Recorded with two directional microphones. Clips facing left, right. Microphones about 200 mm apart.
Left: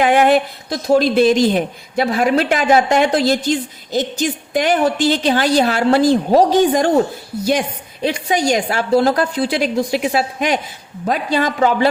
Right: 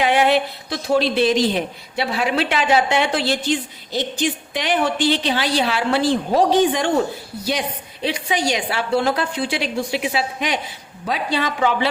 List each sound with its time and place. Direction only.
0.0 s speech: 50° left (ahead or behind)
8.0 s speech: 45° left (ahead or behind)